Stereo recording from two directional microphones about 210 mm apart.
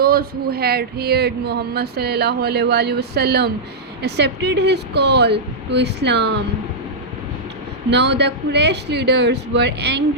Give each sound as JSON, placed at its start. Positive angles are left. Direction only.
{"t": 0.0, "sound": "speech", "side_deg": -45}
{"t": 7.9, "sound": "speech", "side_deg": -55}